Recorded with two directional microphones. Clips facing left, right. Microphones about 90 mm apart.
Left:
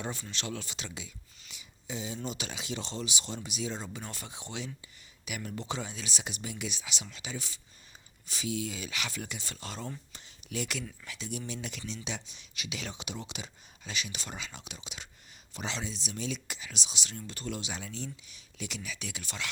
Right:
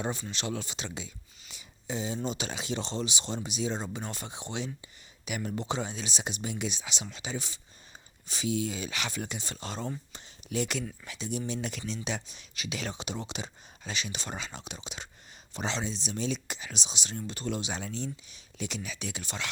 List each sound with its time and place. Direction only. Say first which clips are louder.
0.0 s speech: right 4 dB; 20° right (ahead or behind)
11.7 s speech: right 4 dB; 40° right (ahead or behind); by 19.5 s 25° right (ahead or behind)